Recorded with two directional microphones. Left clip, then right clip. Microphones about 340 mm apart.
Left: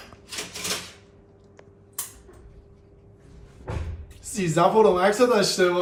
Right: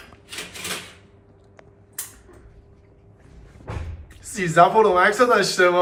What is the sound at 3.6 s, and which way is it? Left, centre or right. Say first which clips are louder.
Speech: even; centre.